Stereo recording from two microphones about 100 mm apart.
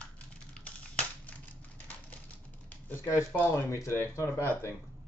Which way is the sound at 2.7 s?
25° left (ahead or behind).